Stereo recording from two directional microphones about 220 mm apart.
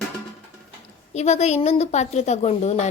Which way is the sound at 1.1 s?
30° left (ahead or behind).